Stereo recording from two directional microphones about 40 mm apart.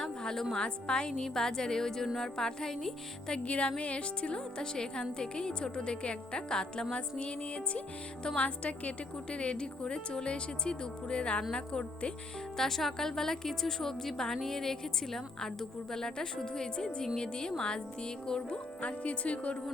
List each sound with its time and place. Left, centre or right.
0.0 s music: centre
0.5 s a woman's voice: centre
3.4 s speech: left
12.5 s a woman's voice: centre
18.8 s speech: left